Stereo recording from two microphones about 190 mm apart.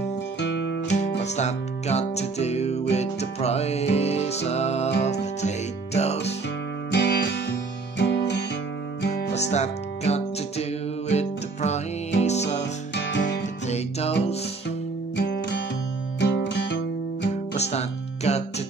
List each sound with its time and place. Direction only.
0.4 s music: 75° left (ahead or behind)
1.2 s music: 35° left (ahead or behind)
5.9 s music: 35° left (ahead or behind)
6.9 s music: 60° left (ahead or behind)
9.3 s music: 35° left (ahead or behind)
12.9 s music: 65° left (ahead or behind)
13.7 s music: 35° left (ahead or behind)
15.1 s music: 60° left (ahead or behind)
17.6 s music: 35° left (ahead or behind)